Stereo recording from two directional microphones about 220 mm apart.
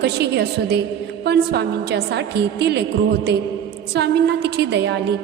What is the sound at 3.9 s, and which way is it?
A woman's voice, 50° right (ahead or behind).